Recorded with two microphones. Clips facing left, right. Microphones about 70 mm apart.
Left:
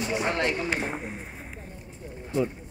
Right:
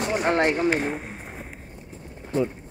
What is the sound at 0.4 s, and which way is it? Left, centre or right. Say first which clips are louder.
Speech: right 5 dB; right.